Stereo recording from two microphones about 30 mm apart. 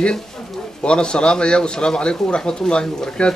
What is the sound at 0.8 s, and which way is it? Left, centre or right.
A man's voice, left.